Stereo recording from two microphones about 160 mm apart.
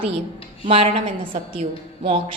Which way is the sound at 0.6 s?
35° right (ahead or behind).